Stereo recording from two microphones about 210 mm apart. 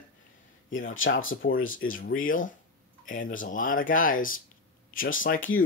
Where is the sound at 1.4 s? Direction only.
40° left (ahead or behind).